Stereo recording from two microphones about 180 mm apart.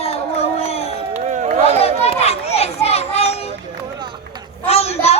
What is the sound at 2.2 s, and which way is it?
Children playing, 35° left (ahead or behind).